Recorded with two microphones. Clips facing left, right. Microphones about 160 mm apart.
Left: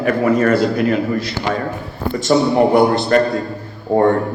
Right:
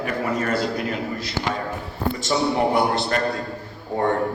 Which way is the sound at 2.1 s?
50° left (ahead or behind).